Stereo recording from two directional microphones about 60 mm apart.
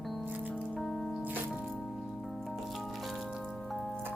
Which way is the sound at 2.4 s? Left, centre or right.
Centre.